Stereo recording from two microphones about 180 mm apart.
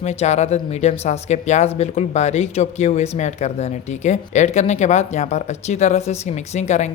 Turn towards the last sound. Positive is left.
turn(degrees=40)  # may be behind; listen again after turning